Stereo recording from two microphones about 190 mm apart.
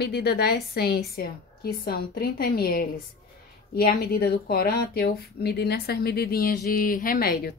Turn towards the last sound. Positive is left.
turn(degrees=50)  # may be behind; listen again after turning